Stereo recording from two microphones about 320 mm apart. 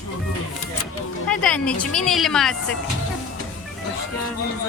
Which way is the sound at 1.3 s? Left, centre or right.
Centre.